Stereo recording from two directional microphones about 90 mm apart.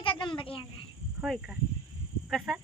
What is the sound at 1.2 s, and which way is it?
Speech, 10° right (ahead or behind).